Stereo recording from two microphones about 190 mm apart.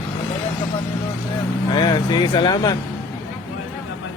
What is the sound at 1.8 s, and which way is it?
Speech, 25° left (ahead or behind).